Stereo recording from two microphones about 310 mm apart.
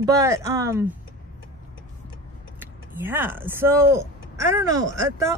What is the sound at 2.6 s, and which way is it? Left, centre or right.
Speech, centre.